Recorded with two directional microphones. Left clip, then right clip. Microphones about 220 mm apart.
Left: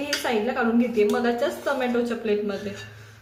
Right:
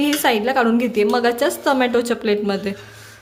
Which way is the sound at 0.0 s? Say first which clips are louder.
Right 7 dB; 50° right (ahead or behind).